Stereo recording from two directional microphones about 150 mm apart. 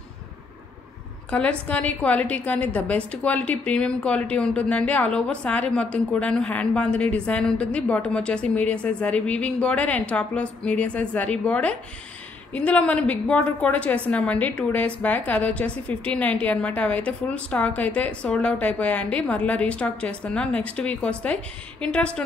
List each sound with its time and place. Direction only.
1.3 s a woman's voice: 10° left (ahead or behind)